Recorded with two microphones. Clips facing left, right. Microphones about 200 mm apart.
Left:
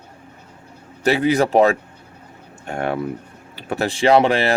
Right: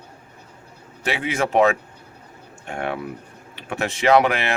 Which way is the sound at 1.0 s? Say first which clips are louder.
Left 7 dB; 40° left (ahead or behind).